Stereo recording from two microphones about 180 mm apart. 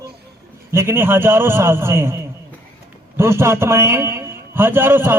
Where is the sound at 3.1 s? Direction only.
15° right (ahead or behind).